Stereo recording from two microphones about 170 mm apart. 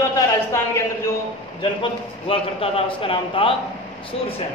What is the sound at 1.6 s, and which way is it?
A man's voice, 35° left (ahead or behind).